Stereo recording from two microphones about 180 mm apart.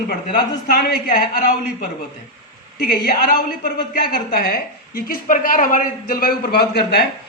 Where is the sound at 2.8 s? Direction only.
55° left (ahead or behind).